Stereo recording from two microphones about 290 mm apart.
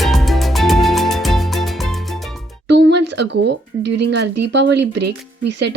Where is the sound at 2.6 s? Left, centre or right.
Right.